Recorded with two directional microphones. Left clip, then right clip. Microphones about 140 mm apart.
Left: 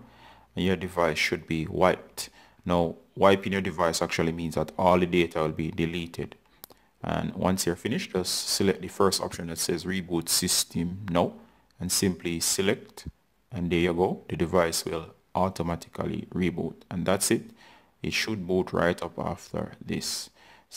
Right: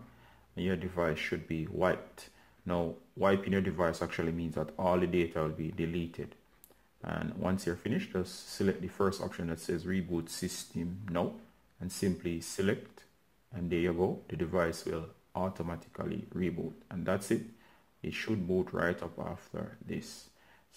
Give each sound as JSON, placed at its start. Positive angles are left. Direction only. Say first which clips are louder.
{"t": 0.6, "sound": "speech", "louder": "left 8 dB", "side_deg": 40}